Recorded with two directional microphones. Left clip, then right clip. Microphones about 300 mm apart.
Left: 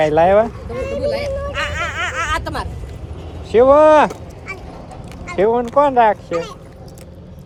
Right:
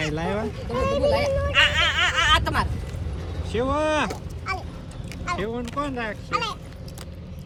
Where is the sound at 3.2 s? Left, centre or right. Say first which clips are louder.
Left 3 dB; centre.